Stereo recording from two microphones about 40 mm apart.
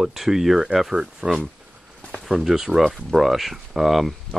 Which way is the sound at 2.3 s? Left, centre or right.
Centre.